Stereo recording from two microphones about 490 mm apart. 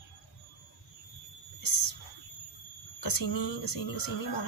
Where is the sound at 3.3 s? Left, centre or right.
Left.